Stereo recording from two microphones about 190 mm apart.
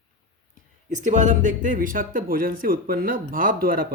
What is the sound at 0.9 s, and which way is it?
Speech, 40° right (ahead or behind).